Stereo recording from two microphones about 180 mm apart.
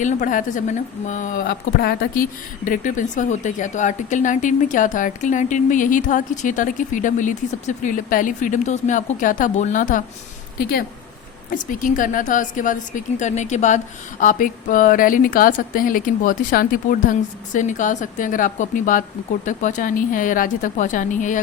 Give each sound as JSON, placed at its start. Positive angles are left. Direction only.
{"t": 0.0, "sound": "speech", "side_deg": 45}
{"t": 2.6, "sound": "speech", "side_deg": 45}
{"t": 10.6, "sound": "a woman's voice", "side_deg": 60}
{"t": 11.5, "sound": "speech", "side_deg": 50}